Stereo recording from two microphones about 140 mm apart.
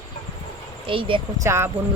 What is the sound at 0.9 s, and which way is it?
Speech, 40° right (ahead or behind).